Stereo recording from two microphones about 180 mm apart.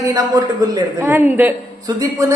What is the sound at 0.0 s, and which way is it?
A woman's voice, 20° right (ahead or behind).